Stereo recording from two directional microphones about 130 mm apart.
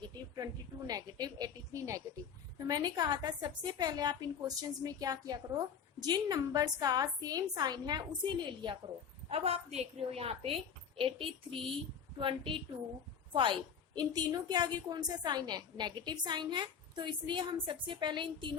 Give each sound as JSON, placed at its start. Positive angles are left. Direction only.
{"t": 0.0, "sound": "a woman's voice", "side_deg": -30}
{"t": 9.3, "sound": "a woman's voice", "side_deg": -55}